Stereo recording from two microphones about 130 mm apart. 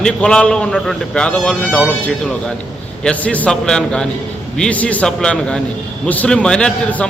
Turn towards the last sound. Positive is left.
turn(degrees=5)  # may be behind; listen again after turning